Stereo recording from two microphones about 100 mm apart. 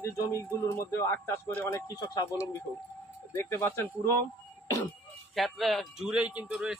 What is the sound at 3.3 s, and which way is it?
Speech, 25° left (ahead or behind).